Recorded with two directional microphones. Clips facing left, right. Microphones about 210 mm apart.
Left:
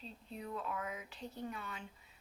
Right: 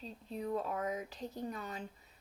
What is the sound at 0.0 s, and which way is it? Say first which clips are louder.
Speech: right 6 dB; 40° right (ahead or behind).